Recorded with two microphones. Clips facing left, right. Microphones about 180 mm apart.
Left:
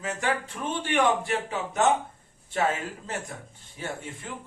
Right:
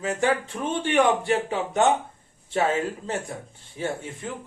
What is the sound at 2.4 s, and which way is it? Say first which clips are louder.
Speech: right 4 dB; 25° right (ahead or behind).